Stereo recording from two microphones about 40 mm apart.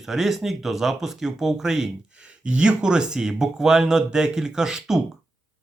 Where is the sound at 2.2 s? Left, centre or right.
Right; by 5.0 s centre.